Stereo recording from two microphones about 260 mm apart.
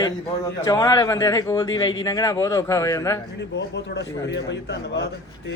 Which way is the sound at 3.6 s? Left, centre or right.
Left.